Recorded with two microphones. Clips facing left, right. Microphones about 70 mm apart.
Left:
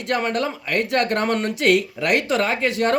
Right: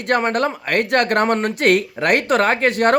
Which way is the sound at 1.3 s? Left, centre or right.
Right.